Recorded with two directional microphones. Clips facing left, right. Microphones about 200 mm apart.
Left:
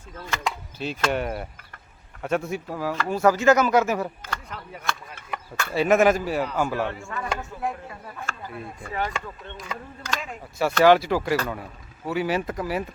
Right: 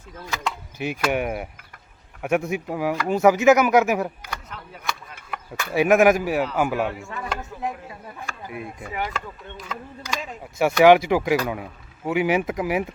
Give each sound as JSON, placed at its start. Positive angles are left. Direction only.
{"t": 0.2, "sound": "speech", "side_deg": -5}
{"t": 0.8, "sound": "fowl", "side_deg": -15}
{"t": 2.2, "sound": "speech", "side_deg": -15}
{"t": 5.5, "sound": "speech", "side_deg": -15}
{"t": 6.4, "sound": "speech", "side_deg": -5}
{"t": 6.7, "sound": "speech", "side_deg": -15}